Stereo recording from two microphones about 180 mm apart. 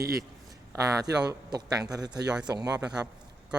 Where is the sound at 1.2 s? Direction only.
20° right (ahead or behind).